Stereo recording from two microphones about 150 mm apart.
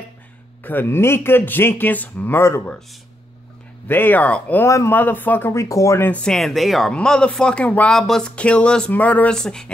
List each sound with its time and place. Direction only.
0.7 s speech: 15° left (ahead or behind)
3.8 s speech: 15° left (ahead or behind)
6.2 s speech: centre (ahead or behind)